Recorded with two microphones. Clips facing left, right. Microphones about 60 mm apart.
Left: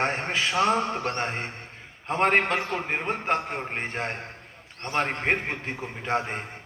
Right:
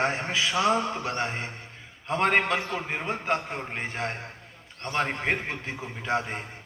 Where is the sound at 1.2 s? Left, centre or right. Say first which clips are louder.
Left 1 dB; left.